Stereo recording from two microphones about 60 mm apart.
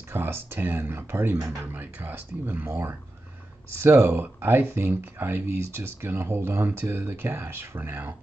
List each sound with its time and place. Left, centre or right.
0.1 s speech: right